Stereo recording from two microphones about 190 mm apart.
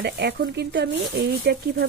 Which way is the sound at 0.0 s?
60° right (ahead or behind).